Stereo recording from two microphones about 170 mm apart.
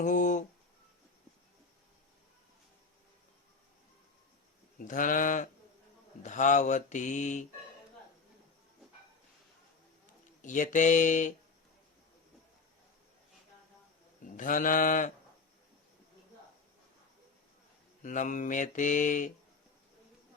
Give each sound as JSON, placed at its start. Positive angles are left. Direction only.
{"t": 0.0, "sound": "mantra", "side_deg": 50}
{"t": 4.8, "sound": "mantra", "side_deg": 50}
{"t": 10.4, "sound": "mantra", "side_deg": 50}
{"t": 14.3, "sound": "mantra", "side_deg": 50}
{"t": 18.0, "sound": "mantra", "side_deg": 50}